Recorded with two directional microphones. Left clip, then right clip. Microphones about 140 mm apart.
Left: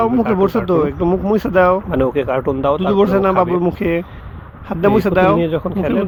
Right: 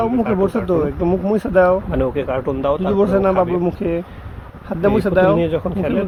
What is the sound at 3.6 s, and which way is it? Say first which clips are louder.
Speech: left 3 dB; 20° left (ahead or behind).